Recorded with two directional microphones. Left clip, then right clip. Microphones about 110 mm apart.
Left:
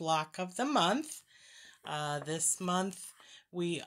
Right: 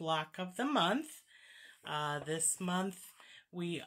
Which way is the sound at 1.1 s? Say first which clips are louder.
Left 4 dB; 35° left (ahead or behind).